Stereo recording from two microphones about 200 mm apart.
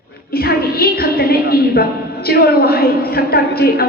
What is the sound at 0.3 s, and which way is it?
A woman's voice, 50° left (ahead or behind).